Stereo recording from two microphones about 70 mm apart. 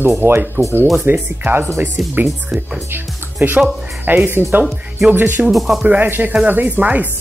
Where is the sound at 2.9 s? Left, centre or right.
Right.